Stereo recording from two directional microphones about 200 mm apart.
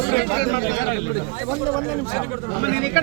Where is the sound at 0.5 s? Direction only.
60° left (ahead or behind).